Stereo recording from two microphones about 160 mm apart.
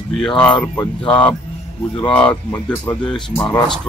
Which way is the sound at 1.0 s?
10° left (ahead or behind).